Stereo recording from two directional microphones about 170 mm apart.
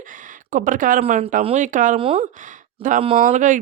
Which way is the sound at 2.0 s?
30° right (ahead or behind).